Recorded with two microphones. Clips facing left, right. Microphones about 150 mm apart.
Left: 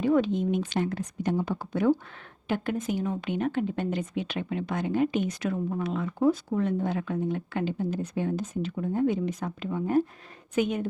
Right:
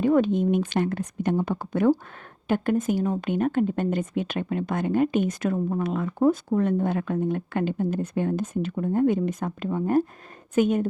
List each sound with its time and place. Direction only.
0.0 s speech: 50° right (ahead or behind)